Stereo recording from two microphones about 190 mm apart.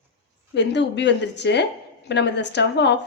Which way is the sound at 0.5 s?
70° left (ahead or behind).